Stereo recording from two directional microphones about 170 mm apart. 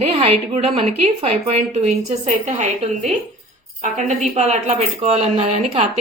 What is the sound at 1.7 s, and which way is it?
A woman's voice, 40° right (ahead or behind).